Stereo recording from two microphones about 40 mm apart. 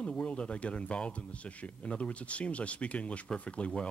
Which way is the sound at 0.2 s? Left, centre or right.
Left.